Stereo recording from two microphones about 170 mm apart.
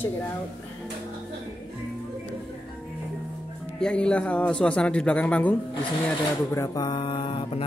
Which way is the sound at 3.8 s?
5° left (ahead or behind).